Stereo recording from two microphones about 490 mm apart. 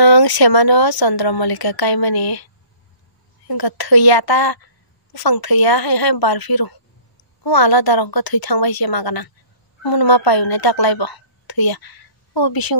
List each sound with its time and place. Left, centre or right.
0.0 s a woman's voice: left